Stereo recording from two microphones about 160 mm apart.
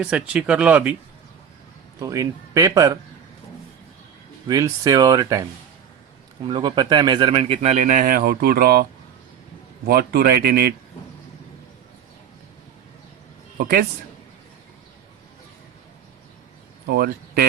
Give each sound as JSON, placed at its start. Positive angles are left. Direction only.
{"t": 0.0, "sound": "speech", "side_deg": -5}
{"t": 2.0, "sound": "speech", "side_deg": -20}
{"t": 4.4, "sound": "speech", "side_deg": -25}
{"t": 16.9, "sound": "speech", "side_deg": -75}